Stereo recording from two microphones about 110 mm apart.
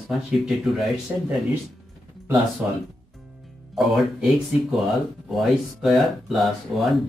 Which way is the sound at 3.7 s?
Centre (ahead or behind).